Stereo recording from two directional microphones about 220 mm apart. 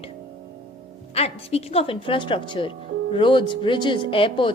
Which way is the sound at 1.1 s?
25° left (ahead or behind).